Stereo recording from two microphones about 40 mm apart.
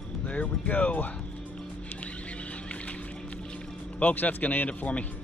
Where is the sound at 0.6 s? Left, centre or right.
Left.